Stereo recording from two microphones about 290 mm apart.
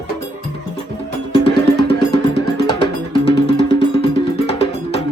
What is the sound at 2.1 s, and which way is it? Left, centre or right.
Music, centre.